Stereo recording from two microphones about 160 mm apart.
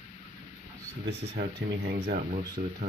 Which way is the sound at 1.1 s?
90° right.